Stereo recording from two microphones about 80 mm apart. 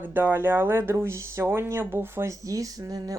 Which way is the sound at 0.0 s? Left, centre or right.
Right.